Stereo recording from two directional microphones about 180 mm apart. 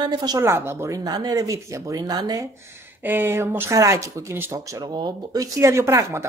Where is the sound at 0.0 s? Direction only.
25° right (ahead or behind).